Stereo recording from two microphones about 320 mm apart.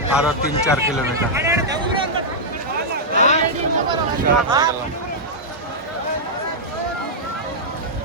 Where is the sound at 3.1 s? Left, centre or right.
Left.